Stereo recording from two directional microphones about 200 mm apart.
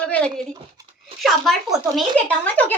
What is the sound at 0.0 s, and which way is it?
Dog, 5° left (ahead or behind).